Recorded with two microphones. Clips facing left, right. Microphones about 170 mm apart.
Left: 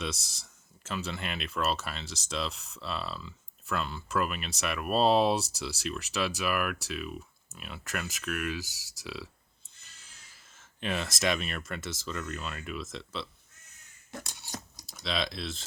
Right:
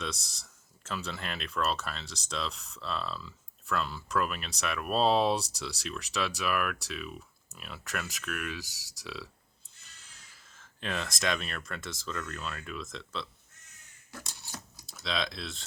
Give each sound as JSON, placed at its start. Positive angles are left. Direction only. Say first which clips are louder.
{"t": 0.0, "sound": "speech", "louder": "left 2 dB", "side_deg": 0}
{"t": 10.3, "sound": "speech", "louder": "right 1 dB", "side_deg": 5}
{"t": 14.1, "sound": "camera", "louder": "left 4 dB", "side_deg": 20}
{"t": 15.0, "sound": "speech", "louder": "left 1 dB", "side_deg": 0}